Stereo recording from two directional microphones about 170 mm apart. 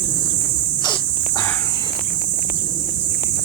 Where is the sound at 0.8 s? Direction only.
25° left (ahead or behind).